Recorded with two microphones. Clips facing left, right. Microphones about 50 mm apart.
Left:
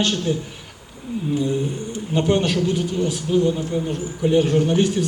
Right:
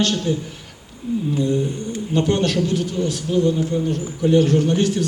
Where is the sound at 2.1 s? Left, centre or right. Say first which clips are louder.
Even; centre.